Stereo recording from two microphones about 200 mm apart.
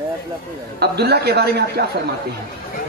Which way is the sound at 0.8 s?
55° right (ahead or behind).